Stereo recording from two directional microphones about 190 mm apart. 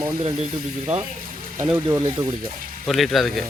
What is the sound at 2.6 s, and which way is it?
Music, 45° right (ahead or behind).